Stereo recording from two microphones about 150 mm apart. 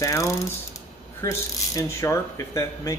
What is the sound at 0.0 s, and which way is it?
Speech, 20° left (ahead or behind).